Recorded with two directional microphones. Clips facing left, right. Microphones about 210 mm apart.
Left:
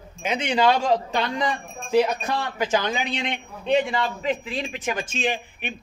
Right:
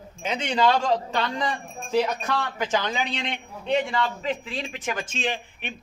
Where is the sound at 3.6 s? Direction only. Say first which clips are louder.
Left 2 dB; 20° left (ahead or behind).